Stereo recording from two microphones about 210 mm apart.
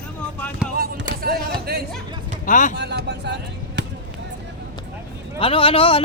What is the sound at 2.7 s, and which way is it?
Speech, 55° right (ahead or behind).